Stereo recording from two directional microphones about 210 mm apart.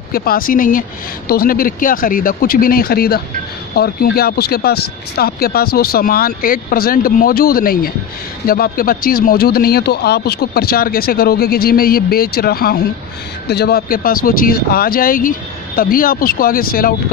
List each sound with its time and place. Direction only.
0.1 s speech: 45° left (ahead or behind)